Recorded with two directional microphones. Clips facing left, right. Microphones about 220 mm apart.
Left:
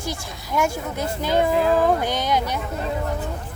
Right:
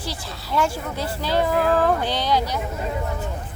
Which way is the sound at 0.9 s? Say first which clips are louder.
Left 3 dB; 20° left (ahead or behind).